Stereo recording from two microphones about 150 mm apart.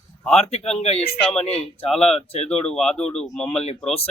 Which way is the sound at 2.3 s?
45° left (ahead or behind).